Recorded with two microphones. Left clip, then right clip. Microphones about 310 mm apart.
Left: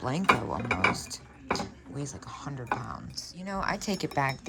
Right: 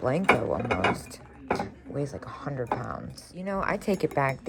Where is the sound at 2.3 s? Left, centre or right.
Centre.